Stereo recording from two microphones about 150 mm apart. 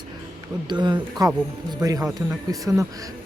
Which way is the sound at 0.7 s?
30° right (ahead or behind).